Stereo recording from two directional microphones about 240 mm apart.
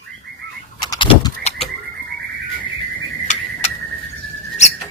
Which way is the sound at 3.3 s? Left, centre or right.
Left.